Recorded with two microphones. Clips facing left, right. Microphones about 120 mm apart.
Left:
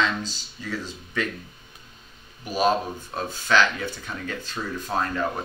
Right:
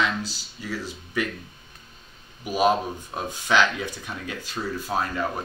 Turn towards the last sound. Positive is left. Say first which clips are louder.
# even
turn(degrees=-10)  # may be behind; listen again after turning